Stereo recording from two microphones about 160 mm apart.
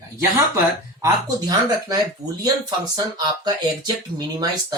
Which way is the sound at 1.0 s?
25° right (ahead or behind).